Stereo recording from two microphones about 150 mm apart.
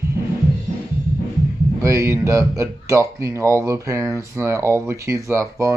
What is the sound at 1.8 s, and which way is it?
Speech, 20° right (ahead or behind).